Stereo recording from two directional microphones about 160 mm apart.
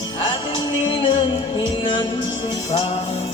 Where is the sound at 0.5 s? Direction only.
30° left (ahead or behind).